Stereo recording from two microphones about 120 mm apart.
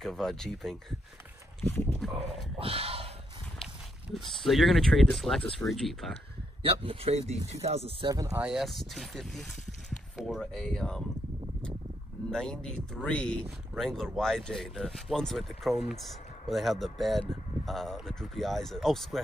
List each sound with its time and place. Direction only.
0.0 s speech: 5° left (ahead or behind)
2.1 s speech: 55° right (ahead or behind)
4.1 s speech: centre (ahead or behind)
6.6 s speech: 50° right (ahead or behind)
8.1 s speech: 30° right (ahead or behind)
8.4 s speech: 5° right (ahead or behind)
12.3 s speech: 5° left (ahead or behind)